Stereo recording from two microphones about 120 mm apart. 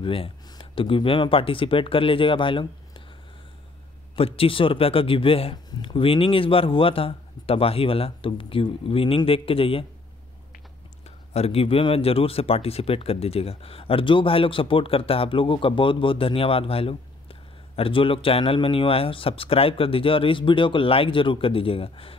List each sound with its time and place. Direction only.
0.0 s speech: 45° left (ahead or behind)
4.1 s speech: 50° left (ahead or behind)
11.1 s speech: 60° left (ahead or behind)